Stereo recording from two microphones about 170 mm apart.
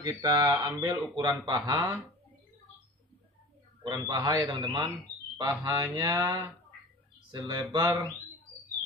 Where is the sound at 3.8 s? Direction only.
25° right (ahead or behind).